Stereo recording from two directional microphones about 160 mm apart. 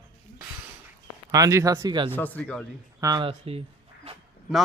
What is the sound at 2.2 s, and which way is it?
Speech, 10° left (ahead or behind).